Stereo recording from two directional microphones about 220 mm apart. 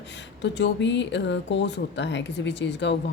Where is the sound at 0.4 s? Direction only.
55° left (ahead or behind).